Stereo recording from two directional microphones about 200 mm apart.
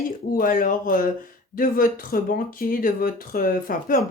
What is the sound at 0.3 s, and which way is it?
Speech, 45° left (ahead or behind).